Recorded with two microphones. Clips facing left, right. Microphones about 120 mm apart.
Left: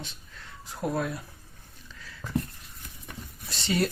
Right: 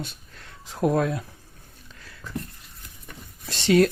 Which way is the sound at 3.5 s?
85° right.